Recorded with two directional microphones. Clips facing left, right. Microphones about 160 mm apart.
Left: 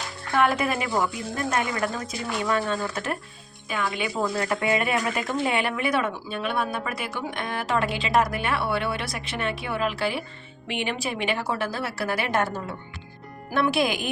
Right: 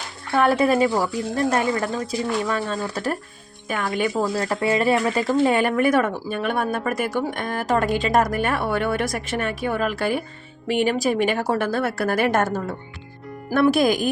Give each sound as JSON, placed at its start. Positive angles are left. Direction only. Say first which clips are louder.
{"t": 0.3, "sound": "speech", "louder": "right 5 dB", "side_deg": -30}
{"t": 3.7, "sound": "speech", "louder": "right 5 dB", "side_deg": -45}
{"t": 4.2, "sound": "speech", "louder": "right 3 dB", "side_deg": -35}